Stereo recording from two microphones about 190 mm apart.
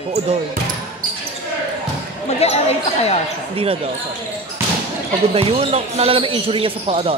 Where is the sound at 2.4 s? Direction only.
35° left (ahead or behind).